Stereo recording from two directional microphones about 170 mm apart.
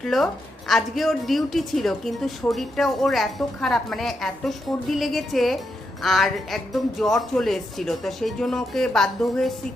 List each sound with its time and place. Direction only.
0.0 s speech: centre (ahead or behind)